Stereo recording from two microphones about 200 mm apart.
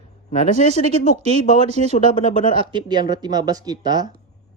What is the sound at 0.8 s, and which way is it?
Speech, 30° right (ahead or behind).